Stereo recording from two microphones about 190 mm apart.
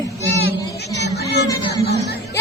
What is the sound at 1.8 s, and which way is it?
Music, 60° left (ahead or behind).